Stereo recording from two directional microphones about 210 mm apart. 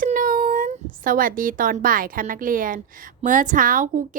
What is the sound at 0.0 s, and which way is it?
Speech, 40° right (ahead or behind).